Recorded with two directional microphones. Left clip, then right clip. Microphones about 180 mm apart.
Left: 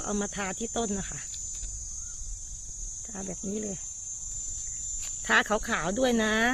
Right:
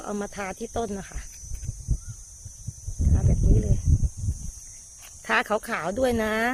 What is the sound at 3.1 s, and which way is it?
Cricket, centre (ahead or behind).